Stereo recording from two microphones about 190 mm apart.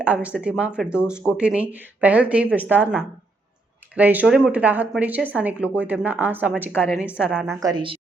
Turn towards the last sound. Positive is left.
turn(degrees=-25)  # may be behind; listen again after turning